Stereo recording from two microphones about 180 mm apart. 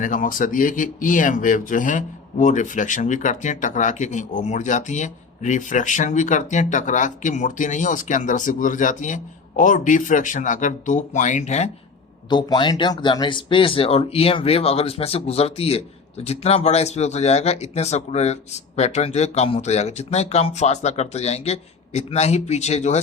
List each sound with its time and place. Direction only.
0.0 s speech: 50° left (ahead or behind)
12.3 s speech: 25° left (ahead or behind)